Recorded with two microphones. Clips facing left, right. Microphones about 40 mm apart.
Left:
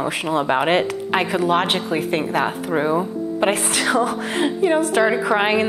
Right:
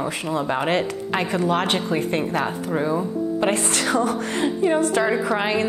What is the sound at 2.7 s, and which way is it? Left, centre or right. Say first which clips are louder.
Speech: left 3 dB; left.